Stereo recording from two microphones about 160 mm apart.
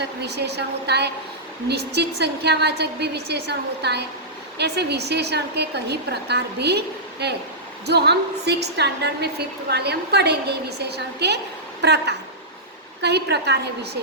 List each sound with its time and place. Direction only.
0.0 s a woman's voice: 90° right